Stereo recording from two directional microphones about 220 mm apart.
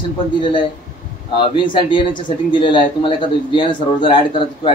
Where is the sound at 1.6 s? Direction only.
20° left (ahead or behind).